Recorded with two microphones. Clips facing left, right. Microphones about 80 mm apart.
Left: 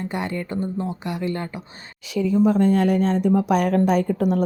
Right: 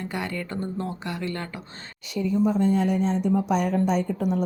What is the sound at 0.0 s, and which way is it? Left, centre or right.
Speech, left.